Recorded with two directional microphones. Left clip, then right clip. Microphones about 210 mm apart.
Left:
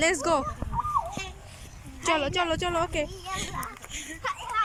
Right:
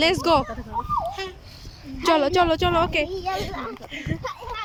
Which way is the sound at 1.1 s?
35° right (ahead or behind).